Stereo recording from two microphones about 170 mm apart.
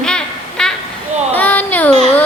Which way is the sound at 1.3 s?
10° left (ahead or behind).